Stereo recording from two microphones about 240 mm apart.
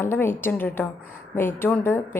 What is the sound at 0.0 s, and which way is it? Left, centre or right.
A woman's voice, centre.